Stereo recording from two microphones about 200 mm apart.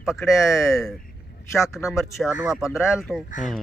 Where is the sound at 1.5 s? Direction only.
15° left (ahead or behind).